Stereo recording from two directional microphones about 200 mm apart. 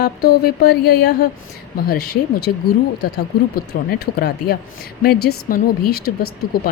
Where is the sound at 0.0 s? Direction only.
50° left (ahead or behind).